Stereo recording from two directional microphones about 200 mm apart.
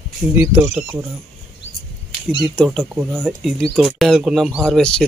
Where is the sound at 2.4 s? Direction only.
5° left (ahead or behind).